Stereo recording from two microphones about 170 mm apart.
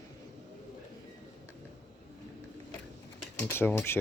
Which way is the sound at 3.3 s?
15° left (ahead or behind).